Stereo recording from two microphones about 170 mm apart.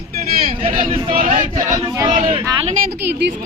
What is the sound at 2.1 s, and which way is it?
Speech, 30° right (ahead or behind).